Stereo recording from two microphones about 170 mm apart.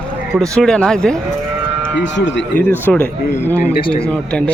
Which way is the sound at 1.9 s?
90° left.